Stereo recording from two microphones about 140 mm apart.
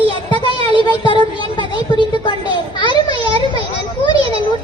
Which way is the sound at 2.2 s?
35° left (ahead or behind).